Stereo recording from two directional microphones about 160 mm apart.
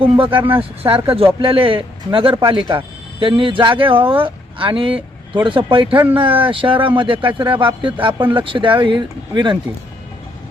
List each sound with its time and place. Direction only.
0.0 s speech: 35° right (ahead or behind)
5.9 s speech: 10° right (ahead or behind)
6.1 s speech: 30° right (ahead or behind)